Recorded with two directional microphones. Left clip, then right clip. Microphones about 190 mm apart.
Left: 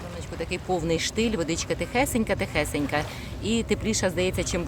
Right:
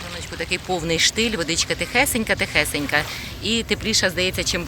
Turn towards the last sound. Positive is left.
turn(degrees=10)  # may be behind; listen again after turning